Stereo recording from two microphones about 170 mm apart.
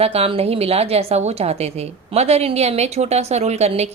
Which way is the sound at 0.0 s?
35° right (ahead or behind).